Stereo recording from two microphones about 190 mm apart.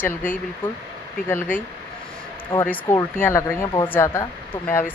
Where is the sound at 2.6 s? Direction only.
15° left (ahead or behind).